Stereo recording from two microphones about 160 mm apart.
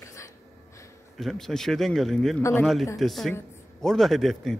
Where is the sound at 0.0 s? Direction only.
20° left (ahead or behind).